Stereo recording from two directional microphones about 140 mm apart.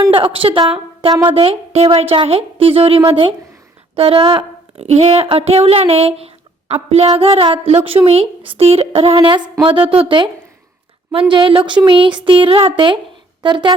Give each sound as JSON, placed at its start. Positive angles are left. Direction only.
{"t": 0.1, "sound": "speech", "side_deg": -40}